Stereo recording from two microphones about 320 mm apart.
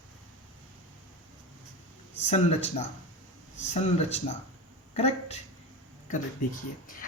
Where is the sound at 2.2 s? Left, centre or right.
Left.